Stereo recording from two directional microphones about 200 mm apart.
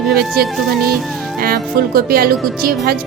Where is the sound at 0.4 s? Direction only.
50° right (ahead or behind).